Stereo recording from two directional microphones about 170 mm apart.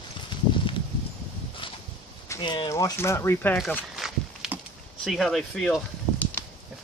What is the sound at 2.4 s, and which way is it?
Speech, 25° left (ahead or behind).